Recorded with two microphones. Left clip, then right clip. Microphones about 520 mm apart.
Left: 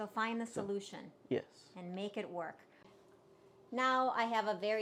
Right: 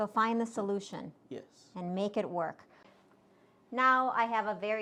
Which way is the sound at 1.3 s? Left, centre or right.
Left.